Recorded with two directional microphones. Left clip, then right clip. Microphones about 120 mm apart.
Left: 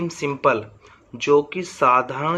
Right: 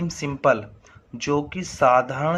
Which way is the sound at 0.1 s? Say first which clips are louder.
Even; 35° right (ahead or behind).